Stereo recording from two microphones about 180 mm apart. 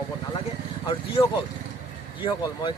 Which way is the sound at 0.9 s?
30° left (ahead or behind).